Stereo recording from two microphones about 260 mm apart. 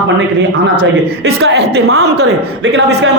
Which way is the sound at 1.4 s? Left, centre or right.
Right.